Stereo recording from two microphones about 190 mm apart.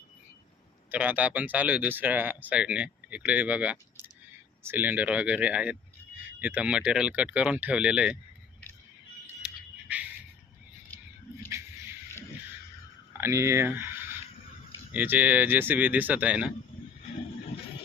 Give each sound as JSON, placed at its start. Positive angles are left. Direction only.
{"t": 0.9, "sound": "speech", "side_deg": -10}
{"t": 11.4, "sound": "a sound", "side_deg": -15}
{"t": 13.1, "sound": "speech", "side_deg": -15}